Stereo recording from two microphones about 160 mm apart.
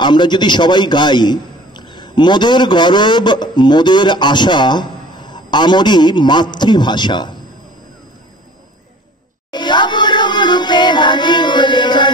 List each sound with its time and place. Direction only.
0.0 s a man's voice: 30° left (ahead or behind)
9.5 s music: 30° left (ahead or behind)